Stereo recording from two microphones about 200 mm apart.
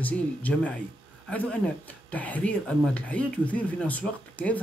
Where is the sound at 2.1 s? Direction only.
5° left (ahead or behind).